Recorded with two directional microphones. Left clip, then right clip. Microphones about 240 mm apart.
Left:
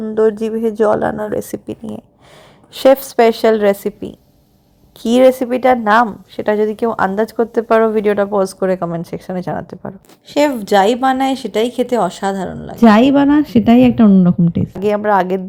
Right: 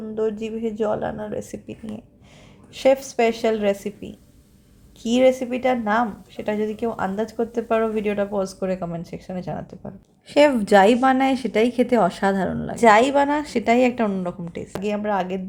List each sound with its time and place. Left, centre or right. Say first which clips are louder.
0.0 s a woman's voice: left 11 dB; left
10.2 s a woman's voice: left 2 dB; centre
14.8 s a woman's voice: left 10 dB; left